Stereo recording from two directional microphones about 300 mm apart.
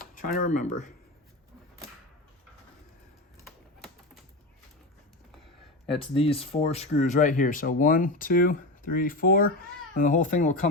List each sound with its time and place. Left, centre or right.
0.1 s speech: left
5.8 s speech: centre